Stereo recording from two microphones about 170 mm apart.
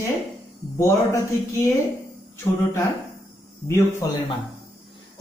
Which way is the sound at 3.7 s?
15° left (ahead or behind).